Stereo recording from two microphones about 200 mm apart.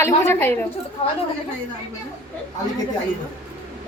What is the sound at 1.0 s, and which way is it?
Speech, 30° left (ahead or behind).